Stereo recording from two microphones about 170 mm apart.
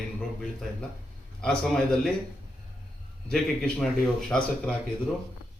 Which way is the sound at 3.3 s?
5° left (ahead or behind).